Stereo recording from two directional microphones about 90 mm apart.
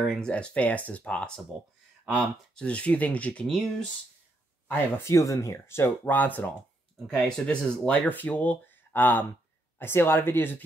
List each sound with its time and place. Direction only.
0.0 s speech: 5° left (ahead or behind)
4.6 s speech: 30° left (ahead or behind)
7.1 s speech: 10° left (ahead or behind)
8.0 s speech: 20° left (ahead or behind)